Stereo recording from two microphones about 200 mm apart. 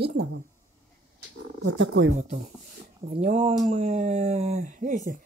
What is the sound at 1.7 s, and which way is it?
Speech, 75° right (ahead or behind).